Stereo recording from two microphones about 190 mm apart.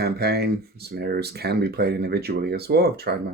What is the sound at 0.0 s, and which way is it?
Speech, 55° right (ahead or behind).